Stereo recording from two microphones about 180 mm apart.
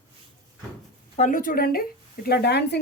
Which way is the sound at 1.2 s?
45° left (ahead or behind).